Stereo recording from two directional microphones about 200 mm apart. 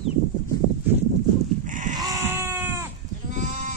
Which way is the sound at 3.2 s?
40° right (ahead or behind).